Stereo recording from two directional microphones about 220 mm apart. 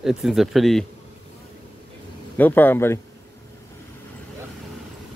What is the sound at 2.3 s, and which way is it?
Speech, 10° left (ahead or behind).